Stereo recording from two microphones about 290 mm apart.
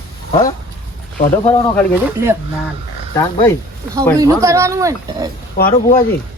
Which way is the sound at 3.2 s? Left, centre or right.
Centre.